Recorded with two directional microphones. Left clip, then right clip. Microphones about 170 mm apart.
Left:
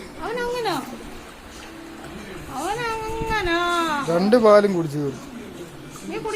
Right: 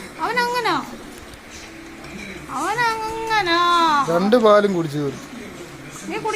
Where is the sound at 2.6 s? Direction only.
50° right (ahead or behind).